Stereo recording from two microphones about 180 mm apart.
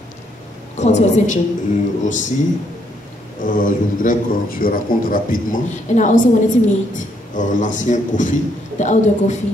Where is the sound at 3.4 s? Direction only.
50° left (ahead or behind).